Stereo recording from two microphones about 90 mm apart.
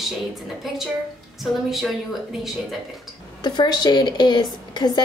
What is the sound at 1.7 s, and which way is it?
Speech, centre (ahead or behind).